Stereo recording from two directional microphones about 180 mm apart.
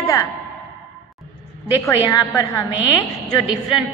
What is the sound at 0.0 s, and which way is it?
Music, 20° left (ahead or behind).